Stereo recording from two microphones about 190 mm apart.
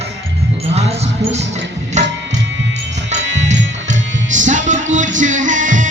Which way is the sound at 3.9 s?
40° right (ahead or behind).